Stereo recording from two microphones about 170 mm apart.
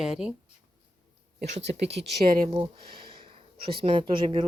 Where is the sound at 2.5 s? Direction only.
30° right (ahead or behind).